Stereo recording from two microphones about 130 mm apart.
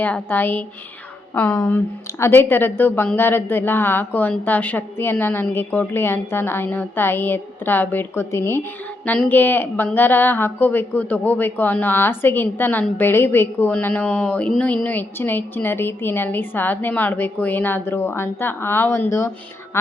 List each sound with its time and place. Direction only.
0.0 s a woman's voice: 15° left (ahead or behind)